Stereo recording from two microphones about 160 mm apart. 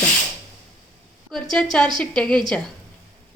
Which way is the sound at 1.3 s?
5° left (ahead or behind).